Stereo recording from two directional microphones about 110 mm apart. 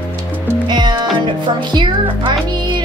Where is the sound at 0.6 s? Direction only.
40° right (ahead or behind).